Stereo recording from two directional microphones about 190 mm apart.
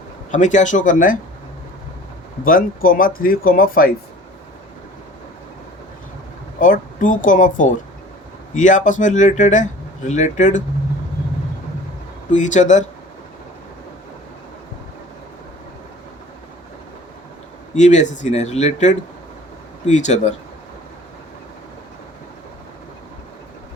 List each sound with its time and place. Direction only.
0.3 s speech: 40° left (ahead or behind)
2.4 s speech: 45° left (ahead or behind)
6.6 s speech: 45° left (ahead or behind)
12.3 s speech: 40° left (ahead or behind)
17.7 s speech: 40° left (ahead or behind)